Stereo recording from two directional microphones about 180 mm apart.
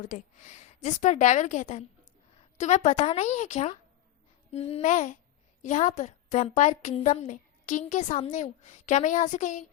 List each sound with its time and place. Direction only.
0.0 s a woman's voice: 45° left (ahead or behind)